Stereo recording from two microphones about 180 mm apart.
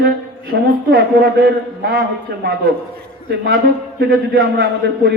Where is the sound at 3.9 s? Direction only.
60° right (ahead or behind).